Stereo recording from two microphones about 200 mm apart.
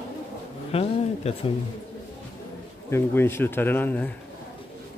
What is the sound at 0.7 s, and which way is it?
Speech, 30° left (ahead or behind).